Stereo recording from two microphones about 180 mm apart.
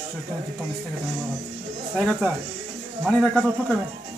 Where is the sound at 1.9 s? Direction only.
Centre (ahead or behind).